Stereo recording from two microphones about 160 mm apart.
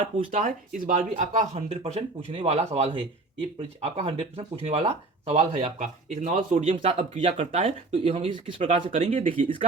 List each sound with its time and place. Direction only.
0.3 s speech: 50° right (ahead or behind)
6.6 s speech: 40° right (ahead or behind)